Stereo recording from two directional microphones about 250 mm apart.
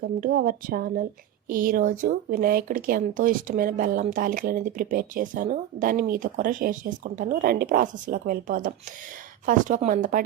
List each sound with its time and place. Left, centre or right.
0.0 s speech: right